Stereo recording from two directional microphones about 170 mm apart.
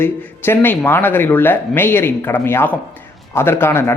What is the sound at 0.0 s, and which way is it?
Speech, 15° left (ahead or behind).